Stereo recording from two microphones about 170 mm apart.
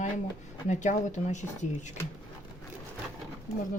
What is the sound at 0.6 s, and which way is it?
Speech, 45° left (ahead or behind).